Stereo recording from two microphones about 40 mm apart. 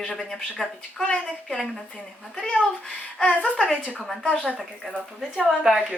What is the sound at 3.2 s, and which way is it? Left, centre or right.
Speech, centre.